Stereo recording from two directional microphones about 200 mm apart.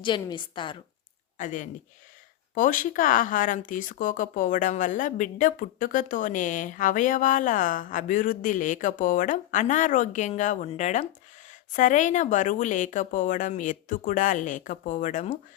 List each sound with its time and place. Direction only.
0.0 s a woman's voice: 25° left (ahead or behind)
1.4 s speech: 40° left (ahead or behind)